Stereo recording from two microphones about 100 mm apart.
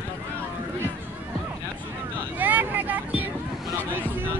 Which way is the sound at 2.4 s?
20° right (ahead or behind).